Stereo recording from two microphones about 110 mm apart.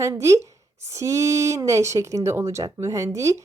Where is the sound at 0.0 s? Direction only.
25° right (ahead or behind).